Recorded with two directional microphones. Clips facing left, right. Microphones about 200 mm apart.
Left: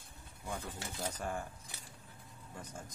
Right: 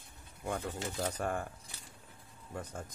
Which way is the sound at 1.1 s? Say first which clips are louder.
Right 4 dB; 60° right (ahead or behind).